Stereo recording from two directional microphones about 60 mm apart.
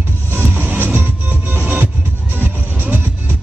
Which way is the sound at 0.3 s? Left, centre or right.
Right.